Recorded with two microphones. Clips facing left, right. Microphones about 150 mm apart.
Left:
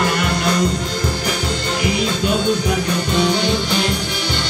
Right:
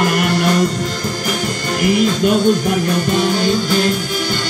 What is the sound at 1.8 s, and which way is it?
Music, 50° right (ahead or behind).